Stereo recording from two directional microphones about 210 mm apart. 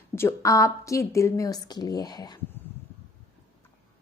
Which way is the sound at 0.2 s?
15° left (ahead or behind).